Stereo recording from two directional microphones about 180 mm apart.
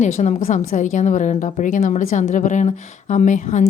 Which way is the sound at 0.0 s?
40° left (ahead or behind).